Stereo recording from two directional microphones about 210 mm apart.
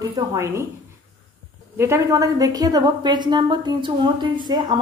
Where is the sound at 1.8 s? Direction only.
15° right (ahead or behind).